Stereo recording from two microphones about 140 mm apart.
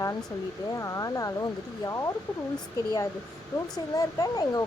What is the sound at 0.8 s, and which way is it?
Speech, 25° left (ahead or behind).